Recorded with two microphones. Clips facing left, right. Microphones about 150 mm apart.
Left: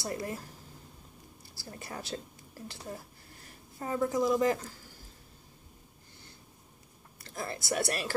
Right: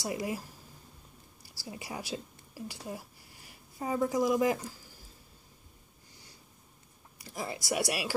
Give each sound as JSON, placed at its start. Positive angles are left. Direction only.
{"t": 0.0, "sound": "speech", "side_deg": -10}
{"t": 7.2, "sound": "speech", "side_deg": -10}